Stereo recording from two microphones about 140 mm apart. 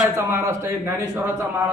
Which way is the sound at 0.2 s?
20° right (ahead or behind).